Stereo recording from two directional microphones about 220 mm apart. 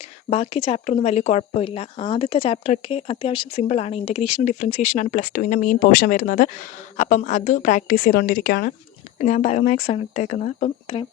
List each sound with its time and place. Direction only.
0.0 s speech: 25° left (ahead or behind)